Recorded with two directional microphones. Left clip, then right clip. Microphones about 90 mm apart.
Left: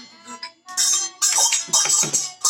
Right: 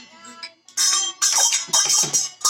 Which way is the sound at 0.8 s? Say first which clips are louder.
Right 2 dB; 30° left (ahead or behind).